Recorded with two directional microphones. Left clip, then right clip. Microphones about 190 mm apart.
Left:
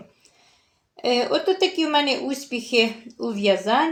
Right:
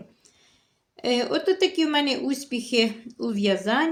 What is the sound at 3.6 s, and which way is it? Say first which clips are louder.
Speech: left 3 dB; 65° right (ahead or behind).